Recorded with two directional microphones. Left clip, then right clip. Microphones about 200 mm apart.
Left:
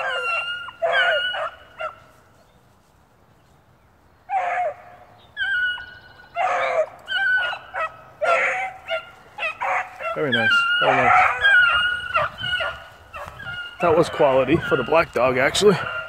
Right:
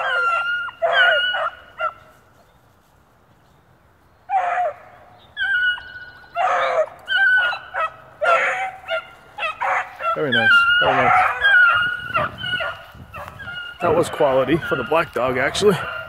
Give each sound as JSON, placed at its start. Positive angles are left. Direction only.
{"t": 0.0, "sound": "dog", "side_deg": 20}
{"t": 4.3, "sound": "a sound", "side_deg": 10}
{"t": 6.3, "sound": "dog", "side_deg": 0}
{"t": 10.8, "sound": "dog", "side_deg": 25}
{"t": 13.7, "sound": "speech", "side_deg": 10}